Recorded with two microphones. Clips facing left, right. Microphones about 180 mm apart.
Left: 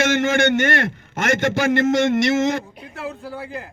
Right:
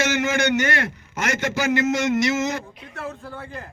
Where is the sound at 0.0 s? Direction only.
55° left (ahead or behind).